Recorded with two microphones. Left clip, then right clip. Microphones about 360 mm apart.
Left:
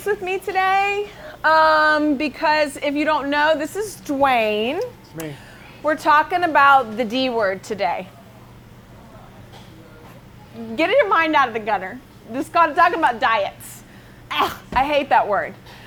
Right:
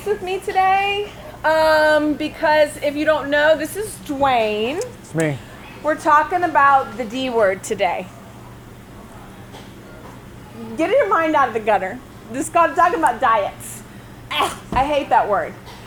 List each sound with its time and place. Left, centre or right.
0.3 s a woman's voice: left
5.1 s speech: right
5.8 s a woman's voice: left
10.8 s a woman's voice: left